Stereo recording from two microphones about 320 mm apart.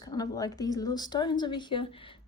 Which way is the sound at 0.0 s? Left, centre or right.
Centre.